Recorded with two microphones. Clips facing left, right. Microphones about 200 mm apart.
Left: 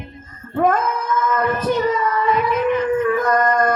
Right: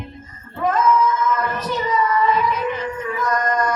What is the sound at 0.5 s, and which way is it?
Child singing, 50° left (ahead or behind).